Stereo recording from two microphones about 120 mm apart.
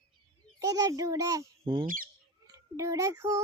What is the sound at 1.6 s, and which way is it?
Speech, 45° right (ahead or behind).